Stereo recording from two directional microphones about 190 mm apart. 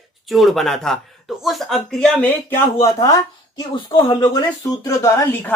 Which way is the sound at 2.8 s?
15° left (ahead or behind).